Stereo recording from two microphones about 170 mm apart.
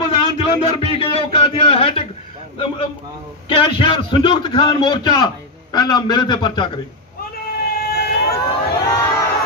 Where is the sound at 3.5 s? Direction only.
30° left (ahead or behind).